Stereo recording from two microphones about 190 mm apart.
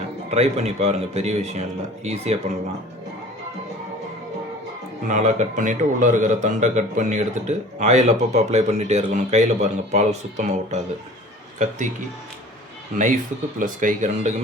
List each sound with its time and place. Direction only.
0.3 s a man's voice: 35° right (ahead or behind)
5.0 s a man's voice: 40° right (ahead or behind)
13.6 s speech: 45° right (ahead or behind)